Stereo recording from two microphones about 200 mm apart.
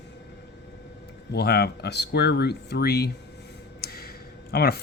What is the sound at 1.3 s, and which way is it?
Speech, 50° left (ahead or behind).